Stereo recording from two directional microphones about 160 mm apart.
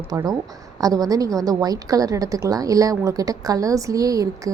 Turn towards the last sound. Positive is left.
turn(degrees=-20)  # may be behind; listen again after turning